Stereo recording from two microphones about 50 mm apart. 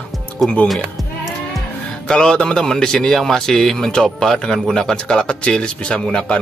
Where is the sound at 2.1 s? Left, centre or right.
Centre.